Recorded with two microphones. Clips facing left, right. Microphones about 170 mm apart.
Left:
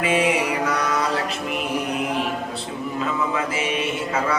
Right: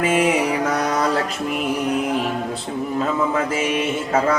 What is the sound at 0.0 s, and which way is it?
Music, 45° right (ahead or behind).